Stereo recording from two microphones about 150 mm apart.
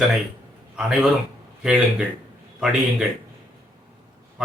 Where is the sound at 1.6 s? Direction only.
5° right (ahead or behind).